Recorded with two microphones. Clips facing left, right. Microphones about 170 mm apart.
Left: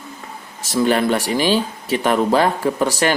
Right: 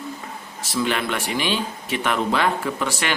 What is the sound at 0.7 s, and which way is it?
Speech, 40° left (ahead or behind).